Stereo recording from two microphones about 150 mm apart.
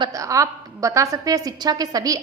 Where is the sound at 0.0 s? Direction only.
20° right (ahead or behind).